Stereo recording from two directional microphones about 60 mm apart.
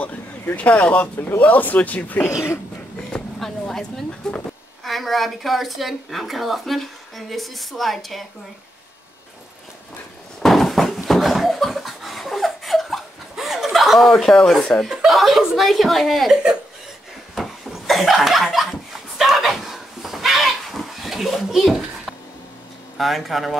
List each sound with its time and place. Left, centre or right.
0.6 s speech: left
3.3 s speech: centre
10.4 s a sound: centre
14.6 s speech: centre
15.0 s speech: centre
17.4 s a sound: centre
22.9 s speech: centre